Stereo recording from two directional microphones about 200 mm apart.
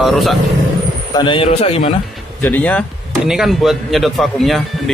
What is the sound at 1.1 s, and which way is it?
Speech, 25° left (ahead or behind).